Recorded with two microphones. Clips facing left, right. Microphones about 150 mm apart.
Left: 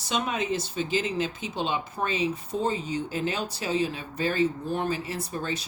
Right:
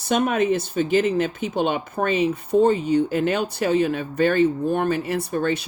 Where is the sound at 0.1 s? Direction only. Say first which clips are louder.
Right 8 dB; 55° right (ahead or behind).